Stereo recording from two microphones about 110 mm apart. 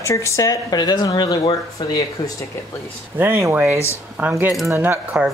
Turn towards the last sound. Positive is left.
turn(degrees=-15)  # may be behind; listen again after turning